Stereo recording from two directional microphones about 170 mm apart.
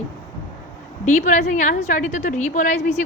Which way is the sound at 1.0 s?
45° left (ahead or behind).